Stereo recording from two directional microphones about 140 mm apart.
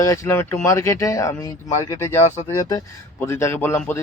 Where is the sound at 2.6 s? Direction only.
25° left (ahead or behind).